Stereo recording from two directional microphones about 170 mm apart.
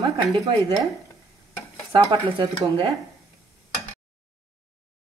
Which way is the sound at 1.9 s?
25° right (ahead or behind).